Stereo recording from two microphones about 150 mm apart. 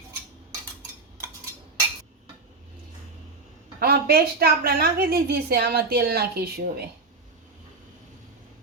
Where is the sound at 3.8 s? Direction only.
90° right.